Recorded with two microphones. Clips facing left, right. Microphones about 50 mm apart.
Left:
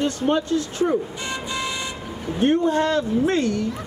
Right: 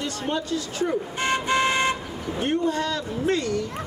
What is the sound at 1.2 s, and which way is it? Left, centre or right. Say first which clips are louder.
Vehicle: right 6 dB; right.